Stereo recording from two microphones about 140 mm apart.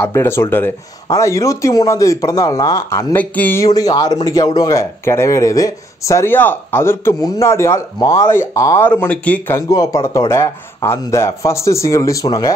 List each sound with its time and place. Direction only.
0.0 s speech: 15° left (ahead or behind)
3.6 s speech: 25° left (ahead or behind); by 9.6 s 10° left (ahead or behind)
9.7 s speech: 25° left (ahead or behind)